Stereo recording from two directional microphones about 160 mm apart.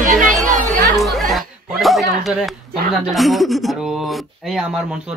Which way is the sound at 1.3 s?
Centre (ahead or behind).